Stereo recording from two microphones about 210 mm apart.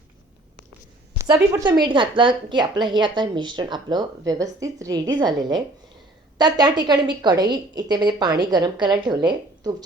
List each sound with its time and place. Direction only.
1.2 s a woman's voice: 15° right (ahead or behind)